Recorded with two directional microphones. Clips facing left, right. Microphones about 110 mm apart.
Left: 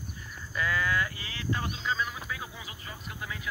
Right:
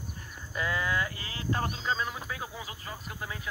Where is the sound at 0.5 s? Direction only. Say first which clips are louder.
Left 1 dB; 25° right (ahead or behind).